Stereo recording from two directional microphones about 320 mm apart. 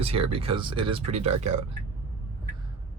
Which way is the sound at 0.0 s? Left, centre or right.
Centre.